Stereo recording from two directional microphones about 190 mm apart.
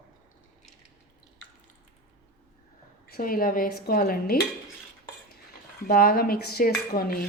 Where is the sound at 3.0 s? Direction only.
50° left (ahead or behind).